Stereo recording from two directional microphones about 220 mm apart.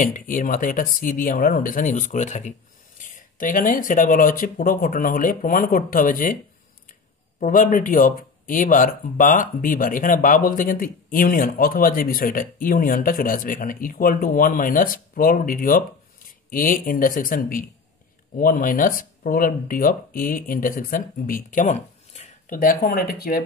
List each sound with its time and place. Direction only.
0.0 s speech: 35° left (ahead or behind)
7.3 s speech: 40° left (ahead or behind)
21.5 s a sound: 35° left (ahead or behind)
22.8 s speech: 40° left (ahead or behind)